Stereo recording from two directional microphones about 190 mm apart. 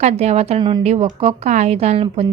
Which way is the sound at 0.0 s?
35° right (ahead or behind).